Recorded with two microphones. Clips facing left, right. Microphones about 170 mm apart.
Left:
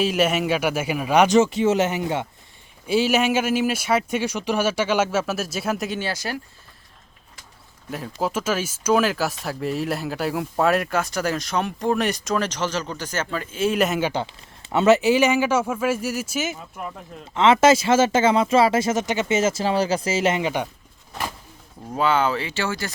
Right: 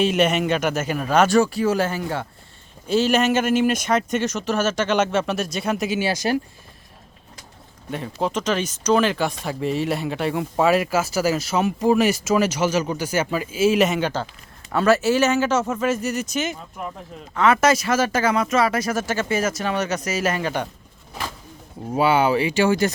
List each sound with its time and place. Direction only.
0.0 s speech: centre (ahead or behind)
6.0 s speech: 15° right (ahead or behind)
7.9 s speech: centre (ahead or behind)
14.7 s speech: 20° left (ahead or behind); by 16.9 s centre (ahead or behind)
17.3 s speech: 25° left (ahead or behind)
21.9 s speech: 10° right (ahead or behind)